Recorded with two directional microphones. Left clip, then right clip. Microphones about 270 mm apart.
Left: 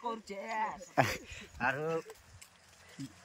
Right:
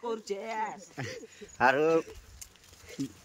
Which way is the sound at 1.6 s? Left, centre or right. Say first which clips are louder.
Right 9 dB; centre.